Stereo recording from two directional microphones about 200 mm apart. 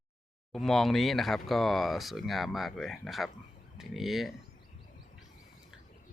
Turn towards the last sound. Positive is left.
turn(degrees=0)  # may be behind; listen again after turning